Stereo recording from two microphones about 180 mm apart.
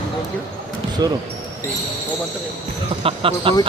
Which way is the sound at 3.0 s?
30° right (ahead or behind).